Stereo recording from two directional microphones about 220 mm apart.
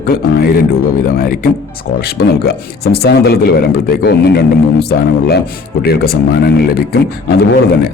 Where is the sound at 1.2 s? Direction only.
45° left (ahead or behind).